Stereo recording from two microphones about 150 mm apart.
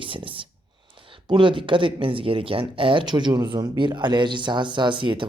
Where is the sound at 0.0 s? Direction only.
35° right (ahead or behind).